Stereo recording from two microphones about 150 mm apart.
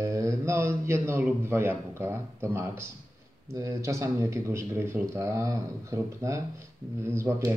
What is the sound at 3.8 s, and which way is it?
A man's voice, 20° right (ahead or behind).